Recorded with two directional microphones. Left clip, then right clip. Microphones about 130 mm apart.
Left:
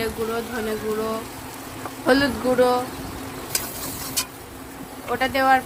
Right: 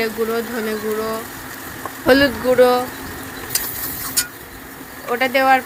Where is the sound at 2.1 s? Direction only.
20° right (ahead or behind).